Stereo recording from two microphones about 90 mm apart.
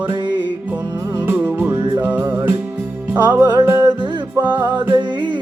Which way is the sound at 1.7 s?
55° right (ahead or behind).